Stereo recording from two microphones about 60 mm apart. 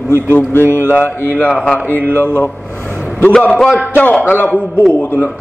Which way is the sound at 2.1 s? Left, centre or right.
Left.